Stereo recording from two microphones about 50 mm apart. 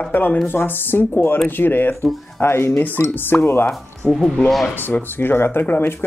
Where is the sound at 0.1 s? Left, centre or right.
Left.